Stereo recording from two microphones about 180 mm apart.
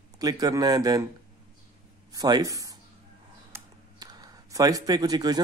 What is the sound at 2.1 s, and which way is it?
Speech, 20° right (ahead or behind).